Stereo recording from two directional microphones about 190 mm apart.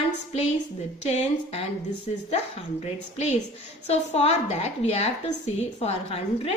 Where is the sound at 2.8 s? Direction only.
35° left (ahead or behind).